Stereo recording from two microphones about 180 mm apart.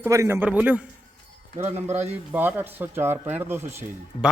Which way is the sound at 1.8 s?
10° right (ahead or behind).